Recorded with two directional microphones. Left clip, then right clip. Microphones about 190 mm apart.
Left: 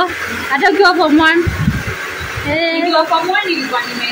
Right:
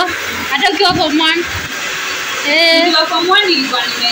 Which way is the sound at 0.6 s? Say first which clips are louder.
Left 2 dB; 40° left (ahead or behind).